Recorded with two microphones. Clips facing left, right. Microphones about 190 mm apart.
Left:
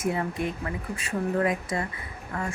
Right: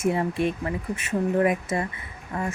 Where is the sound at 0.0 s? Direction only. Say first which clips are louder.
Right 4 dB; 25° right (ahead or behind).